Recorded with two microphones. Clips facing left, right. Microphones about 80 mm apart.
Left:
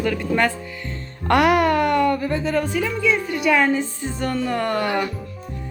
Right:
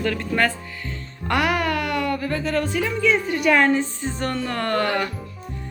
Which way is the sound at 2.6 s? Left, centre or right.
Centre.